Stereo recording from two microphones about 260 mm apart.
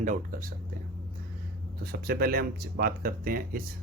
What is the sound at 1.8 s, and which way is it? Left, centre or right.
Speech, right.